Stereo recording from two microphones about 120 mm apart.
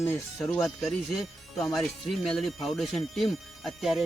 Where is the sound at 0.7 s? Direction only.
Centre (ahead or behind).